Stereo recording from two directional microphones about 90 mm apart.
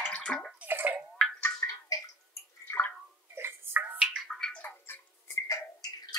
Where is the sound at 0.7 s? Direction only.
25° right (ahead or behind).